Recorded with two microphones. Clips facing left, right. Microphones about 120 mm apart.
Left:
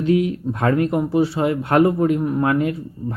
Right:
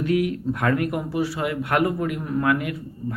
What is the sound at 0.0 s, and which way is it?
Speech, 25° left (ahead or behind).